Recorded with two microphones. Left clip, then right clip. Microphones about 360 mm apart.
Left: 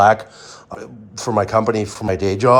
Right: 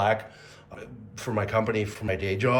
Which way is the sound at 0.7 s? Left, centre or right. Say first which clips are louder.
Left 10 dB; centre.